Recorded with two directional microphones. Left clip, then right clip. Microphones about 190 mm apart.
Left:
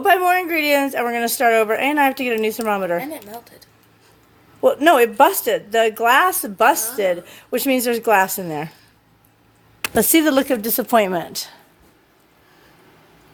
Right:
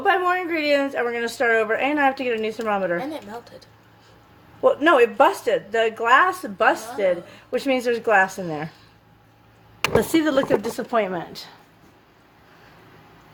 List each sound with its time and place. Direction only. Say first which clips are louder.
0.0 s a woman's voice: left 5 dB; 60° left (ahead or behind)
4.6 s a woman's voice: left 2 dB; 60° left (ahead or behind)
10.0 s a woman's voice: left 7 dB; 55° left (ahead or behind)